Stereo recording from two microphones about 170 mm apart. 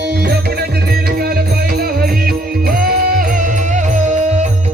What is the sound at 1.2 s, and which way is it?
Music, 65° right (ahead or behind).